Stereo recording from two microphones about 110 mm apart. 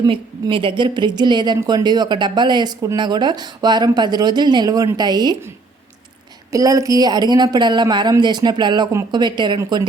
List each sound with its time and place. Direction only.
0.1 s a woman's voice: 50° right (ahead or behind)
6.5 s a woman's voice: 30° right (ahead or behind)